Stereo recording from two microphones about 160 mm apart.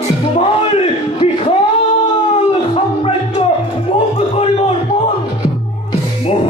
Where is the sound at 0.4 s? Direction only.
40° left (ahead or behind).